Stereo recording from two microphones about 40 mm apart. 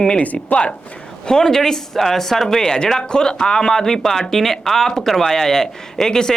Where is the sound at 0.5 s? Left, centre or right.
Left.